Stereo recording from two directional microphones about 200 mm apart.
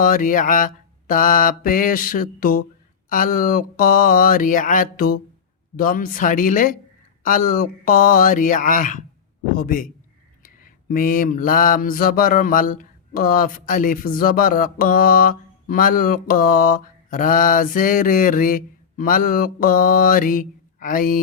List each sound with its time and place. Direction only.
0.0 s mantra: 40° left (ahead or behind)
7.2 s speech: 40° left (ahead or behind)
9.6 s mantra: 45° left (ahead or behind)